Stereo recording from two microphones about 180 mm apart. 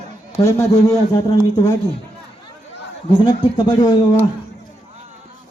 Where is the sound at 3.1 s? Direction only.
25° left (ahead or behind).